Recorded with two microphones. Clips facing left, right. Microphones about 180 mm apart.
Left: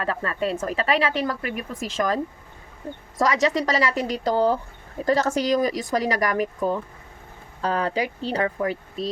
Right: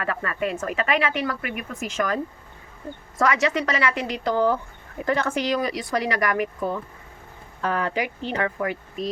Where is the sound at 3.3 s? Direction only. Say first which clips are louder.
Left 2 dB; 35° left (ahead or behind).